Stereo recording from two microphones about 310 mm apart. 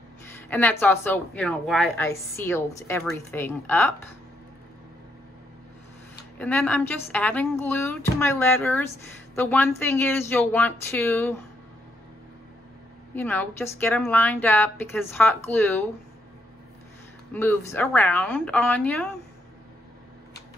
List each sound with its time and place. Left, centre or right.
0.3 s speech: centre
6.3 s a woman's voice: centre
13.1 s speech: centre
17.3 s a woman's voice: centre